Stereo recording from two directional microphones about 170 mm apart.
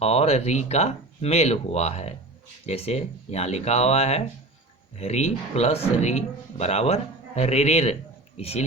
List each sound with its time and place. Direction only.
0.0 s speech: 40° left (ahead or behind)